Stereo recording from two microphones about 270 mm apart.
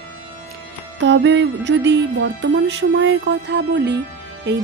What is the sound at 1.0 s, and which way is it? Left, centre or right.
Music, right.